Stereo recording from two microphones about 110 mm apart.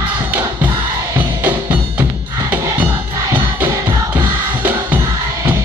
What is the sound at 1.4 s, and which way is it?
Percussion, 15° right (ahead or behind).